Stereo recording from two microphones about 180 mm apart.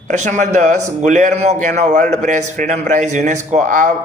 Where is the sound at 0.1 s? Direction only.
40° right (ahead or behind).